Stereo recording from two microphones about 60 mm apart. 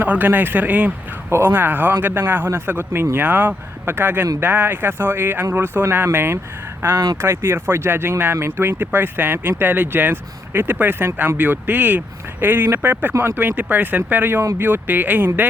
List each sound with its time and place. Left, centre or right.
0.0 s speech: right
3.2 s speech: right